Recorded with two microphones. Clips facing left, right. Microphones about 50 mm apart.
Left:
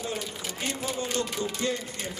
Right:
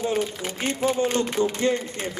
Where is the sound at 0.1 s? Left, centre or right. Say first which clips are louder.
Right 8 dB; right.